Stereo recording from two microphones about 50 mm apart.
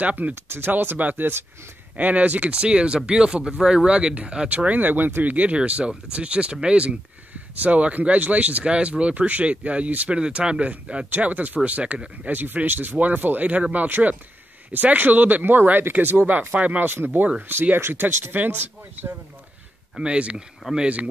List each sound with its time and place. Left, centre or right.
0.0 s speech: right
0.3 s speech: right
2.0 s speech: right
11.1 s speech: right
12.3 s speech: right
13.8 s speech: right
16.9 s speech: right
20.0 s speech: right